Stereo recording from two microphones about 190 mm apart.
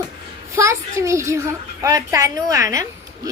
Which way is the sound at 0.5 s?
15° right (ahead or behind).